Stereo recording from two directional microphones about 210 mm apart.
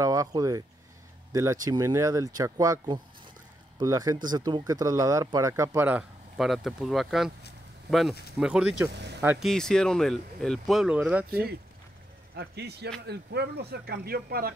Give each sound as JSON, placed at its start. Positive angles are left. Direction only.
{"t": 0.0, "sound": "speech", "side_deg": -15}
{"t": 8.4, "sound": "speech", "side_deg": -5}
{"t": 9.5, "sound": "speech", "side_deg": 5}
{"t": 12.4, "sound": "speech", "side_deg": -50}